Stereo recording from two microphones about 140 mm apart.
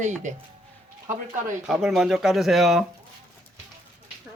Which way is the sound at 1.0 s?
70° right (ahead or behind).